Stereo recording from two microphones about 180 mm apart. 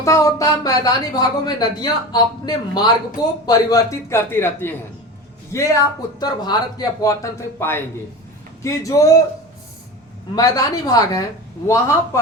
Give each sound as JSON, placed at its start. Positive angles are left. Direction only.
{"t": 0.0, "sound": "speech", "side_deg": 15}
{"t": 10.3, "sound": "speech", "side_deg": 20}